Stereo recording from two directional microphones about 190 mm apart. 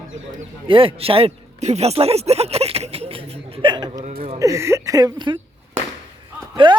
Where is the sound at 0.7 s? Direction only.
30° right (ahead or behind).